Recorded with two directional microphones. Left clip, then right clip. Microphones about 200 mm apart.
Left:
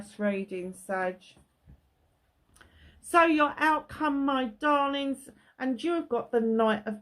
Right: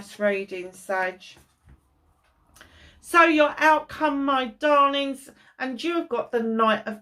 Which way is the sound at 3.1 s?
50° left (ahead or behind).